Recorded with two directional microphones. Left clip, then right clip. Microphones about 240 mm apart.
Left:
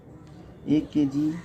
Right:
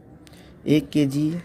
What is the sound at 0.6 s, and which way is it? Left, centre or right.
Speech, right.